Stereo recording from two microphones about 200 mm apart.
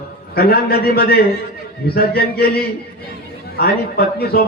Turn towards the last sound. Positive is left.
turn(degrees=50)  # may be behind; listen again after turning